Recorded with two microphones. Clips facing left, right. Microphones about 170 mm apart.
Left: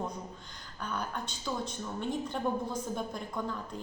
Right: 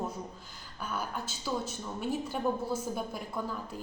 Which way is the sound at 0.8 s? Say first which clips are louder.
Even; 5° right (ahead or behind).